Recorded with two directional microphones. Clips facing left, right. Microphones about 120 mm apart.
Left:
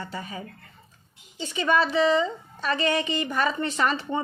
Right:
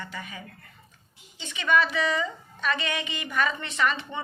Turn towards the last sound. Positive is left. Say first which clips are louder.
# left 2 dB
turn(degrees=35)  # may be behind; listen again after turning